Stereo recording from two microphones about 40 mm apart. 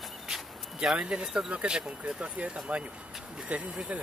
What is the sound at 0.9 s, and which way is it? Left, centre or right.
Speech, centre.